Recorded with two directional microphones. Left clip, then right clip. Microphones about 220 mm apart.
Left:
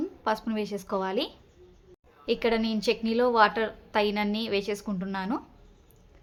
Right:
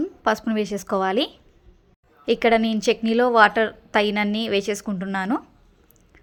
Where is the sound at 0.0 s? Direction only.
25° right (ahead or behind).